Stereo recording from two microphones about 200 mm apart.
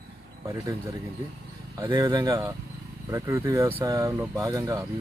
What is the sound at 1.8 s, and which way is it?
Speech, 20° right (ahead or behind).